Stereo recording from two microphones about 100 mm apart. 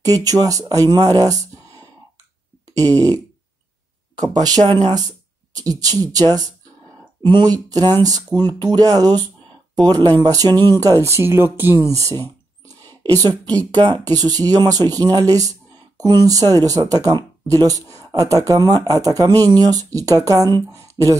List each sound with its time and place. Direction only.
0.0 s speech: 40° right (ahead or behind)
4.2 s speech: 40° right (ahead or behind)
7.7 s speech: 40° right (ahead or behind); by 11.8 s 20° right (ahead or behind)
11.9 s speech: 35° right (ahead or behind)
13.7 s speech: 45° right (ahead or behind)